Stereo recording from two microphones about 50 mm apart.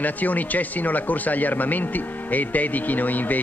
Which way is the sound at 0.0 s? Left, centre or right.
Left.